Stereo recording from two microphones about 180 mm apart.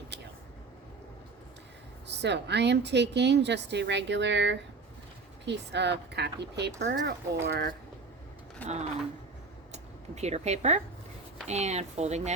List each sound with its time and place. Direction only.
2.0 s a woman's voice: 70° right (ahead or behind)
8.6 s speech: 40° right (ahead or behind)